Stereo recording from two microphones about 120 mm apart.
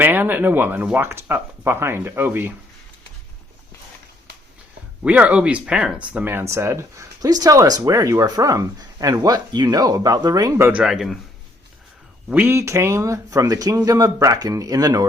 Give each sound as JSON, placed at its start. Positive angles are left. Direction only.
{"t": 0.0, "sound": "speech", "side_deg": -15}
{"t": 5.0, "sound": "speech", "side_deg": -10}
{"t": 10.7, "sound": "speech", "side_deg": -5}
{"t": 12.3, "sound": "speech", "side_deg": -20}